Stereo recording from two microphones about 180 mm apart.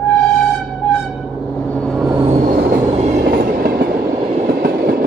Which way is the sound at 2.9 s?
40° right (ahead or behind).